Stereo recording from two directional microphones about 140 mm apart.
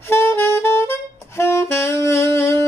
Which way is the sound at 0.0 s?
20° left (ahead or behind).